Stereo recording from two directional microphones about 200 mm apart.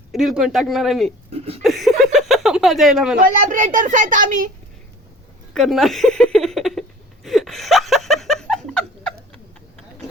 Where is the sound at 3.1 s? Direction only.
40° right (ahead or behind).